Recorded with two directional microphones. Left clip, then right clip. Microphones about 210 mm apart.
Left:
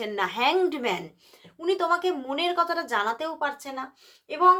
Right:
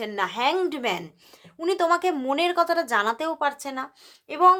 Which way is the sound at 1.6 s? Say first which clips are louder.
Right 2 dB; 40° right (ahead or behind).